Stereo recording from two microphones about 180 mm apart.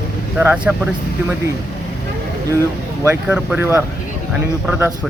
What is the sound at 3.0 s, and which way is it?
Speech, 10° right (ahead or behind).